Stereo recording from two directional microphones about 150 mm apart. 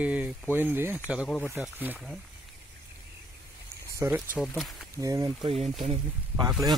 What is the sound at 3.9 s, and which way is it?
Speech, 20° right (ahead or behind).